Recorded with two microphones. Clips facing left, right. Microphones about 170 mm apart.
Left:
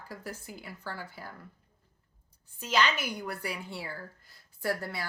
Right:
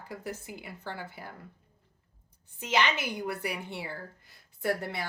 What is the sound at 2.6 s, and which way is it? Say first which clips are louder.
Speech: even; 20° right (ahead or behind).